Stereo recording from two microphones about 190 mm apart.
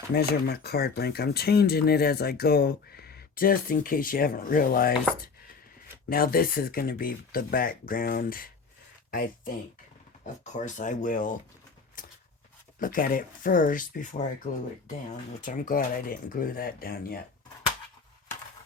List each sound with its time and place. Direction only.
0.1 s speech: 55° left (ahead or behind)
6.1 s speech: 50° left (ahead or behind)
12.0 s a sound: 45° left (ahead or behind)
12.8 s speech: 45° left (ahead or behind)
15.4 s speech: 45° left (ahead or behind)